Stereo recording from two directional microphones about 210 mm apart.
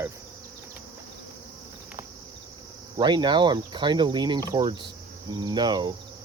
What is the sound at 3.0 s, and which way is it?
Speech, 20° right (ahead or behind).